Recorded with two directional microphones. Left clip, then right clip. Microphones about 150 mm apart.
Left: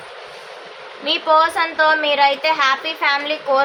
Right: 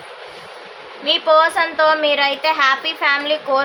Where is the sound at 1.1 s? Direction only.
5° right (ahead or behind).